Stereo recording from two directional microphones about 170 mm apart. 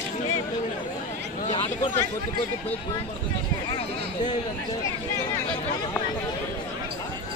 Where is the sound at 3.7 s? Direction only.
25° left (ahead or behind).